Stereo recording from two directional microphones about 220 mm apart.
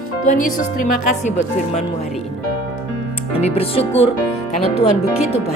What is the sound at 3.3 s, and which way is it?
Speech, 25° left (ahead or behind).